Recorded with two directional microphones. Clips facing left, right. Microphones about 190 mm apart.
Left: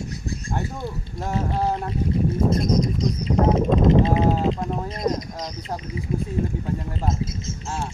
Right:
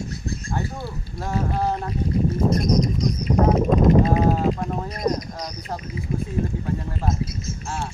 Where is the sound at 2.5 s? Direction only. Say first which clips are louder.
Right 1 dB; 25° left (ahead or behind).